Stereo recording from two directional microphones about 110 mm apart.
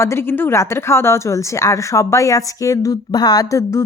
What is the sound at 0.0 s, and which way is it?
A woman's voice, 25° left (ahead or behind).